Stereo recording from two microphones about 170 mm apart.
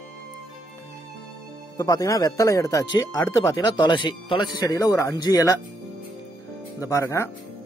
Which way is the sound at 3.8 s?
30° left (ahead or behind).